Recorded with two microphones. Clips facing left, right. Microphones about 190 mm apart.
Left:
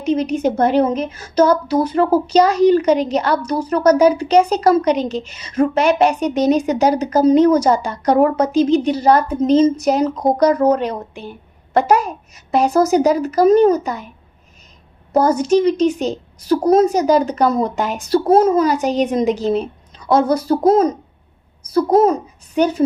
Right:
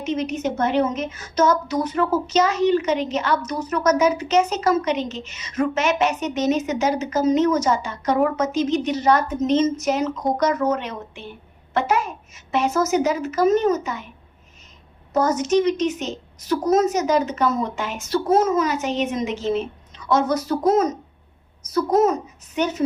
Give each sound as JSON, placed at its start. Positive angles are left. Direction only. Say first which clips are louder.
{"t": 0.0, "sound": "a woman's voice", "louder": "left 6 dB", "side_deg": 35}
{"t": 15.1, "sound": "a woman's voice", "louder": "left 5 dB", "side_deg": 35}